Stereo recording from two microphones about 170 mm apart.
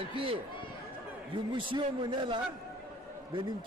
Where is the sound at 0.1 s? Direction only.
30° right (ahead or behind).